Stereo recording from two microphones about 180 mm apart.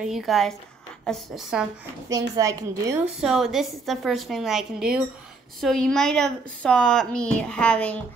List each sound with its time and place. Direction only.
0.0 s a woman's voice: centre (ahead or behind)
2.0 s a woman's voice: 20° right (ahead or behind)
3.2 s a woman's voice: centre (ahead or behind)